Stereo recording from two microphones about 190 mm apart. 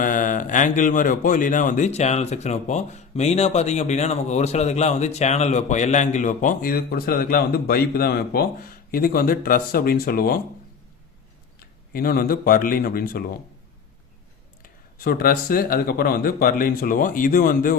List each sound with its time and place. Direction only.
0.0 s speech: 45° left (ahead or behind)
11.6 s speech: 50° left (ahead or behind)
14.6 s speech: 50° left (ahead or behind)